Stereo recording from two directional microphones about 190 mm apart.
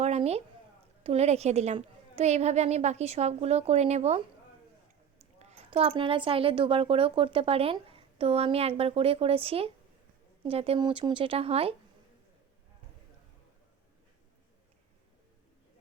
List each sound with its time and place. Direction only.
0.0 s a woman's voice: 35° right (ahead or behind)
5.2 s speech: 35° right (ahead or behind)